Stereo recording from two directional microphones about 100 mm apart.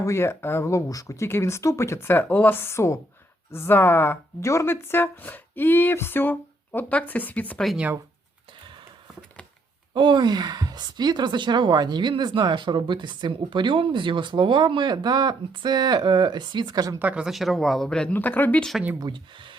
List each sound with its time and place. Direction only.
0.0 s speech: 25° left (ahead or behind)
9.9 s speech: 50° right (ahead or behind)
17.0 s speech: 15° right (ahead or behind); by 18.6 s 15° left (ahead or behind)
18.9 s speech: 50° right (ahead or behind)